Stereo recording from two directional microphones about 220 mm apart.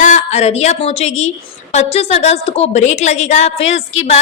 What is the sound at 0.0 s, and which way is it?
A woman's voice, 30° left (ahead or behind).